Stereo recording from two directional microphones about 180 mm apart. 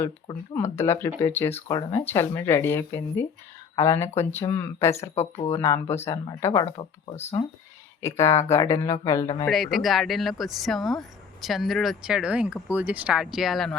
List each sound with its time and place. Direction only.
0.5 s speech: 15° left (ahead or behind)
5.1 s speech: 35° left (ahead or behind)
5.5 s speech: 15° left (ahead or behind)
8.0 s speech: 15° left (ahead or behind)
9.5 s speech: centre (ahead or behind)